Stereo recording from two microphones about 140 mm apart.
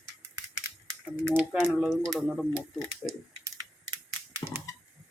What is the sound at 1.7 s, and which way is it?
Speech, centre (ahead or behind).